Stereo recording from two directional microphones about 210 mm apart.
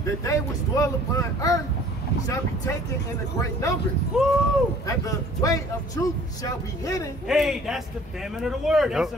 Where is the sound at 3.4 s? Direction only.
15° left (ahead or behind).